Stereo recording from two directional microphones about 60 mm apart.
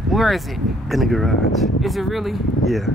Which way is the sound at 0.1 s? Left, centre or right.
Centre.